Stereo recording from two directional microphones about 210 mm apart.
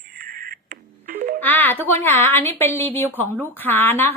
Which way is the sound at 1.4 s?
10° left (ahead or behind).